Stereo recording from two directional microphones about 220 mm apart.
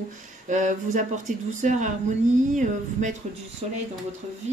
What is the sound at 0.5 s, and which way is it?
Speech, 35° right (ahead or behind).